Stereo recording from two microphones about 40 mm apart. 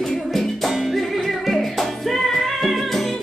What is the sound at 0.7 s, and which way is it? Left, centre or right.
Music, centre.